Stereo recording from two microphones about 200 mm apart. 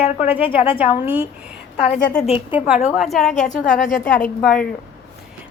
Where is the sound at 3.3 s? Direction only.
40° left (ahead or behind).